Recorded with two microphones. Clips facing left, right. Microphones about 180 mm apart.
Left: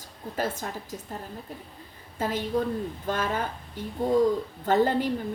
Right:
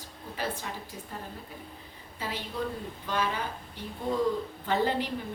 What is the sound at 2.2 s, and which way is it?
A woman's voice, 50° left (ahead or behind).